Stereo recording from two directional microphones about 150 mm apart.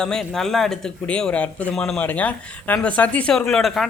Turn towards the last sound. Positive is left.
turn(degrees=0)  # may be behind; listen again after turning